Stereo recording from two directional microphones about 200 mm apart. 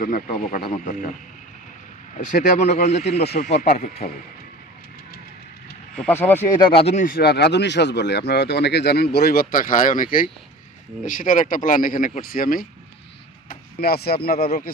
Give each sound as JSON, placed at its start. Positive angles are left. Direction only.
{"t": 0.3, "sound": "speech", "side_deg": 40}
{"t": 2.1, "sound": "speech", "side_deg": 40}
{"t": 6.0, "sound": "speech", "side_deg": 10}
{"t": 6.6, "sound": "speech", "side_deg": 25}